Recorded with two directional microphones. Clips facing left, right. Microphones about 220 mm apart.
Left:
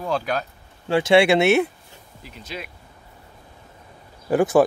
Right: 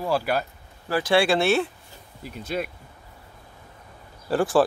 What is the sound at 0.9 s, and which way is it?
Speech, 25° left (ahead or behind).